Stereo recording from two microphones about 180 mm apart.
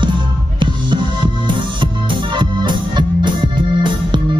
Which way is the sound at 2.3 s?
25° right (ahead or behind).